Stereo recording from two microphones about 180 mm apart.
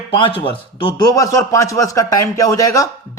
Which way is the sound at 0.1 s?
30° left (ahead or behind).